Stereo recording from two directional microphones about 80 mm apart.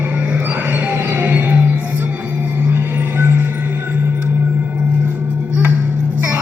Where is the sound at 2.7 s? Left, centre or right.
Right.